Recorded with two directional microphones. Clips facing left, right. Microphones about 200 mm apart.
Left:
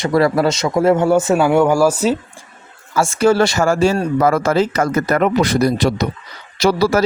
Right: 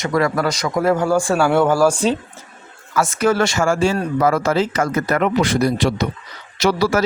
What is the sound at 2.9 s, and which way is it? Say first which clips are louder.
Speech: left 3 dB; 30° left (ahead or behind).